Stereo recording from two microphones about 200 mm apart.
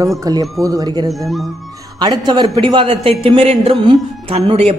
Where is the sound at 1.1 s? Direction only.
Centre (ahead or behind).